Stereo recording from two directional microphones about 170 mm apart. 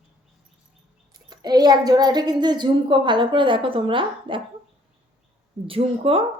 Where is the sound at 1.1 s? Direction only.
25° right (ahead or behind).